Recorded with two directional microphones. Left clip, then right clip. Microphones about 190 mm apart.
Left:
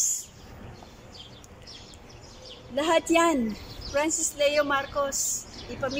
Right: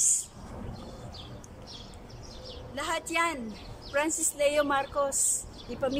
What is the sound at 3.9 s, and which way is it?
A woman's voice, 10° right (ahead or behind).